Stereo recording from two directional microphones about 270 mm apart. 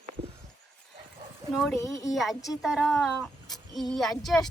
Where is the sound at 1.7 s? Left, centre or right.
Centre.